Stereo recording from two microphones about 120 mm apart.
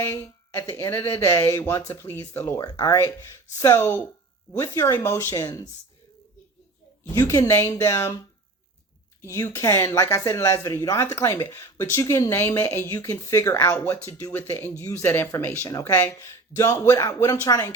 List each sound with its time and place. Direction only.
0.0 s speech: 20° left (ahead or behind)
7.1 s speech: 30° left (ahead or behind)
9.4 s speech: 25° left (ahead or behind)
16.6 s speech: 30° left (ahead or behind)